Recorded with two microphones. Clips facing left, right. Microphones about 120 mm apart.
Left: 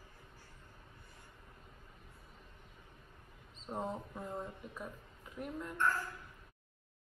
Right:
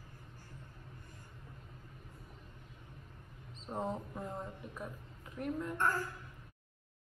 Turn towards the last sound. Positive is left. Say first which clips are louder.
# right 1 dB
turn(degrees=-45)  # may be behind; listen again after turning